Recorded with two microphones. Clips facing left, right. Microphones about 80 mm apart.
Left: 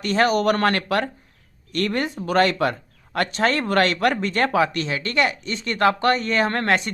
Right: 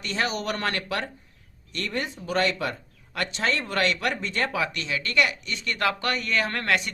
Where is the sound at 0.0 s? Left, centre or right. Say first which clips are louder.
Left 9 dB; left.